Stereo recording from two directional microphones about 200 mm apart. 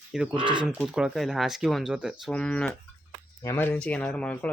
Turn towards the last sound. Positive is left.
turn(degrees=5)  # may be behind; listen again after turning